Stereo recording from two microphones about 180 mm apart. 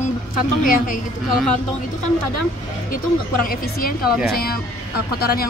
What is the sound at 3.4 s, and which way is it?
A woman's voice, 55° left (ahead or behind).